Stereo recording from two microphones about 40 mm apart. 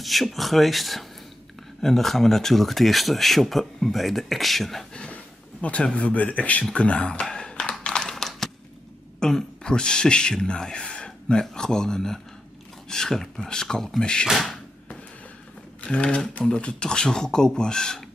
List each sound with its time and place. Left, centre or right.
0.0 s speech: centre
4.9 s a sound: left
5.9 s speech: left
7.8 s a sound: left
9.2 s speech: centre
15.8 s speech: left